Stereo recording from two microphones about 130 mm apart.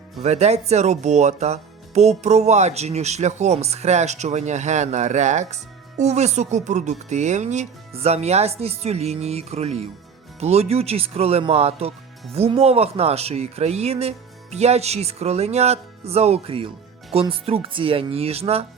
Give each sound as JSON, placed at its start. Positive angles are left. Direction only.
{"t": 0.2, "sound": "speech", "side_deg": -55}